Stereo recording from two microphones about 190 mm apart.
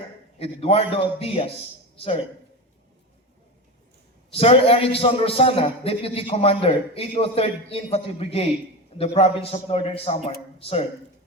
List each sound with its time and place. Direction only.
0.3 s a man's voice: 30° left (ahead or behind)
4.3 s a man's voice: 30° left (ahead or behind)